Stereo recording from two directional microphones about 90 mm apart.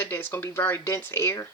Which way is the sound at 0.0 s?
25° left (ahead or behind).